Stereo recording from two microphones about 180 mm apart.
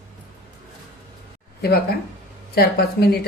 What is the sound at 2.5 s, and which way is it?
Speech, 60° left (ahead or behind).